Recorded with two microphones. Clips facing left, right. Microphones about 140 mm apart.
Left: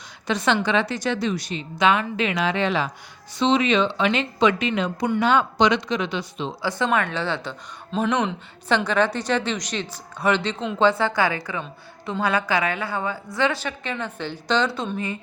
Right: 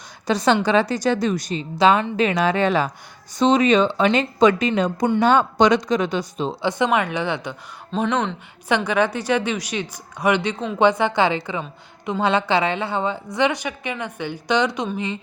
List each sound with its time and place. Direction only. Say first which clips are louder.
0.3 s a woman's voice: right 4 dB; 35° right (ahead or behind)
6.6 s speech: right 2 dB; 20° right (ahead or behind)
7.9 s speech: right 1 dB; 10° left (ahead or behind)
8.9 s a woman's voice: right 3 dB; 10° right (ahead or behind)